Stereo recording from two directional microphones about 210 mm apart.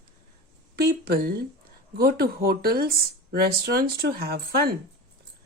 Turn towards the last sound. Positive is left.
turn(degrees=-45)  # may be behind; listen again after turning